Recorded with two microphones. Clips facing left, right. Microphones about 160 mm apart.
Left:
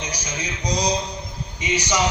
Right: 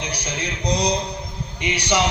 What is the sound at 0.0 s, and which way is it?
A man's voice, 65° right (ahead or behind).